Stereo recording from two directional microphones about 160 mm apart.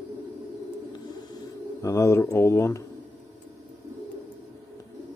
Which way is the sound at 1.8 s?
15° left (ahead or behind).